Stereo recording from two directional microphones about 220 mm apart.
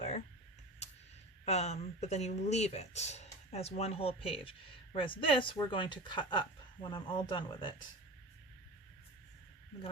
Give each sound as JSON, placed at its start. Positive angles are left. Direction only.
{"t": 1.5, "sound": "speech", "side_deg": 30}